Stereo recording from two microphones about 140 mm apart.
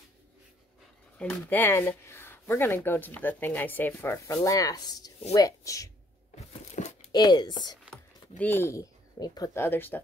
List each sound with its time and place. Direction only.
1.1 s speech: 10° left (ahead or behind)
6.7 s a sound: 55° left (ahead or behind)
7.1 s speech: 30° left (ahead or behind)
7.9 s speech: 15° left (ahead or behind)